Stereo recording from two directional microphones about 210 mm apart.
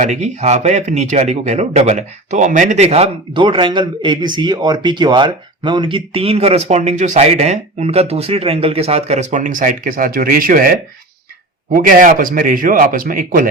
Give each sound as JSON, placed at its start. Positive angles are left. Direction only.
{"t": 0.0, "sound": "speech", "side_deg": -35}